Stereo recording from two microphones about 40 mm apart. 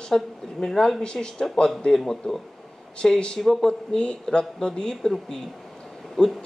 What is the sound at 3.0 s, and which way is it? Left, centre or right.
Speech, left.